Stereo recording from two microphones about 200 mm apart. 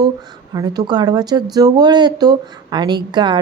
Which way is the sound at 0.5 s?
20° right (ahead or behind).